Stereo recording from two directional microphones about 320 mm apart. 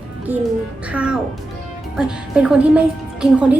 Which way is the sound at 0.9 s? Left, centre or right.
Centre.